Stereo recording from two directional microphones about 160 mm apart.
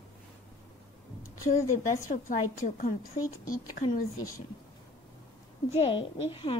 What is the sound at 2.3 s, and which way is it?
Speech, 55° left (ahead or behind).